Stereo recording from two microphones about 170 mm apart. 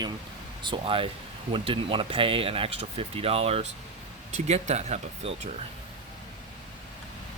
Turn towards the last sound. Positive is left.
turn(degrees=-40)  # may be behind; listen again after turning